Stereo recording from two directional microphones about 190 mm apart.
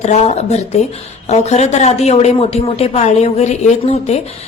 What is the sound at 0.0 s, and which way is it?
A woman's voice, 35° left (ahead or behind).